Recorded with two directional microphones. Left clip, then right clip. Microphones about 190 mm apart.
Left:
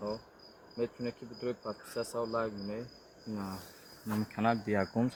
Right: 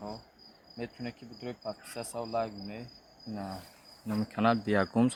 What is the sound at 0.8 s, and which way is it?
Speech, 45° right (ahead or behind).